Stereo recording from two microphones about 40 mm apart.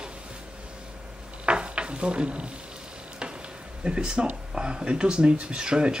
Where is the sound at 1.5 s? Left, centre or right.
Right.